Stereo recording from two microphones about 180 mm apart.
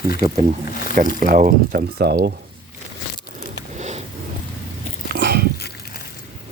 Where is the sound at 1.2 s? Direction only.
50° right (ahead or behind).